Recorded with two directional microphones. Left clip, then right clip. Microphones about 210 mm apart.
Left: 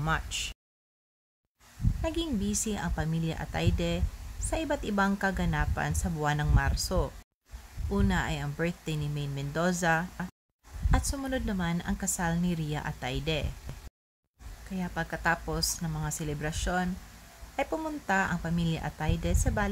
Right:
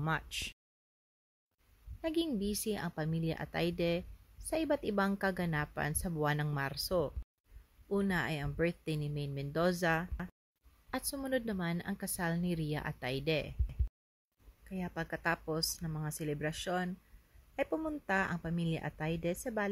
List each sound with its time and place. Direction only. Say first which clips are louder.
0.0 s speech: left 5 dB; 20° right (ahead or behind)
2.0 s speech: left 2 dB; 20° right (ahead or behind)
14.7 s speech: left 5 dB; 20° right (ahead or behind)